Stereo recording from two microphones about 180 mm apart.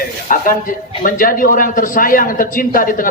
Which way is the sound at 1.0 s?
50° left (ahead or behind).